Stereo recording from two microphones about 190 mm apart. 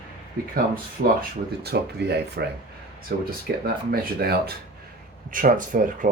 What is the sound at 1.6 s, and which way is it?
Speech, 60° right (ahead or behind).